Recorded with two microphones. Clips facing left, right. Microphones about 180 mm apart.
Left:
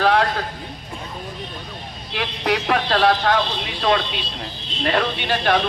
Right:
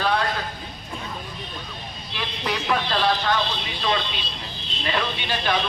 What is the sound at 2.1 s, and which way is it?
A man's voice, 75° left (ahead or behind).